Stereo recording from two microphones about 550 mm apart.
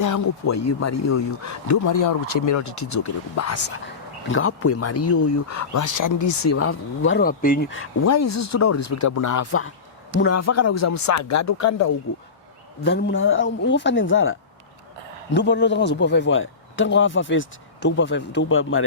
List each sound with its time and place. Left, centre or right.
0.0 s speech: left
12.8 s speech: centre